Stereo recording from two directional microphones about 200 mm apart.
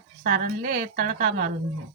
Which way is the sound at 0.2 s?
50° right (ahead or behind).